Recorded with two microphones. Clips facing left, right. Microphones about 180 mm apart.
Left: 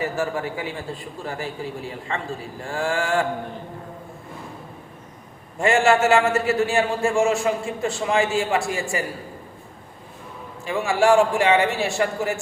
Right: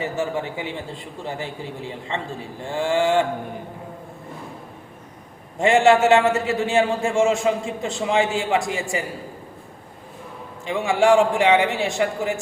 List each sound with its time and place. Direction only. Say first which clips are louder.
0.0 s a man's voice: even; 20° right (ahead or behind)
5.5 s a man's voice: right 2 dB; 20° right (ahead or behind)
10.7 s a man's voice: right 1 dB; 20° right (ahead or behind)